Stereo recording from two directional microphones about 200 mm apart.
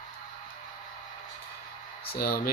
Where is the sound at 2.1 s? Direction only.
50° left (ahead or behind).